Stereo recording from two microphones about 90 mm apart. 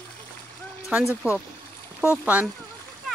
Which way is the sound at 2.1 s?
15° right (ahead or behind).